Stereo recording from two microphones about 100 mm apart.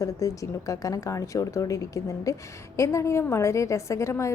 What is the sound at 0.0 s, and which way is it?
A woman's voice, 35° left (ahead or behind).